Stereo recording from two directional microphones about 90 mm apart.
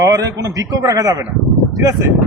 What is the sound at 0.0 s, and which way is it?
Speech, 40° right (ahead or behind).